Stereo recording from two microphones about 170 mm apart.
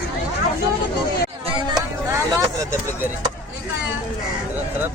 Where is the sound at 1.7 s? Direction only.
15° right (ahead or behind).